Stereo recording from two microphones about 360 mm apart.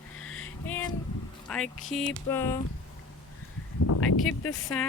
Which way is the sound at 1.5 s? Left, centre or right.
Centre.